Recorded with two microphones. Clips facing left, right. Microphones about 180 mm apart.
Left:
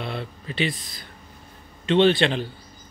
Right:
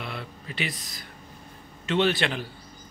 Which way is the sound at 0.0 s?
30° left (ahead or behind).